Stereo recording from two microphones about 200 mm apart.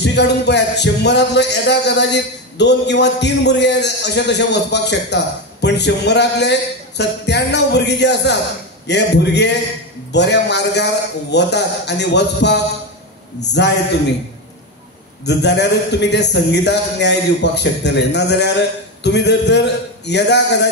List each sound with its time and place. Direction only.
0.0 s speech: 60° left (ahead or behind)
15.2 s speech: 60° left (ahead or behind)